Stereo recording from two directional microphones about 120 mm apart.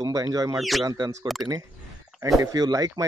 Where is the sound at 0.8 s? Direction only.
30° right (ahead or behind).